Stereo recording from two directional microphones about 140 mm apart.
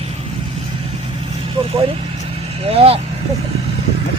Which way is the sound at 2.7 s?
45° right (ahead or behind).